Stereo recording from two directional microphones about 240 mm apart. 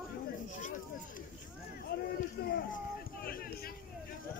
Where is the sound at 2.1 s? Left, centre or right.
Left.